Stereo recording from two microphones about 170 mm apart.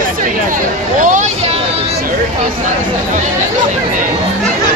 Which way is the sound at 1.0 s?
50° right (ahead or behind).